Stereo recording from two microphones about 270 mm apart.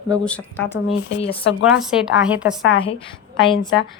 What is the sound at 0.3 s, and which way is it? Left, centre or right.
Speech, centre.